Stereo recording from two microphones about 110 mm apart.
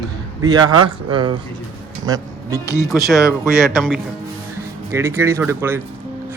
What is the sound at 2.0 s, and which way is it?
Music, 35° right (ahead or behind).